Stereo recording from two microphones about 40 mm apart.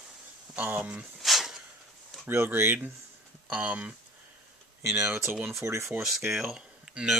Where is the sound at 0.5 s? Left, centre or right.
Right.